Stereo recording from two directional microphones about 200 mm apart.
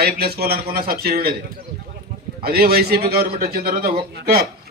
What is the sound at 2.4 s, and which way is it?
A man's voice, 50° right (ahead or behind).